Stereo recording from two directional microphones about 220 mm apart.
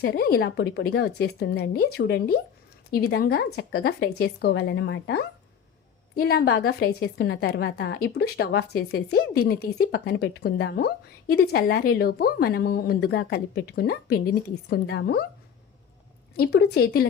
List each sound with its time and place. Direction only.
0.0 s a woman's voice: 45° left (ahead or behind)
16.4 s a woman's voice: 50° left (ahead or behind)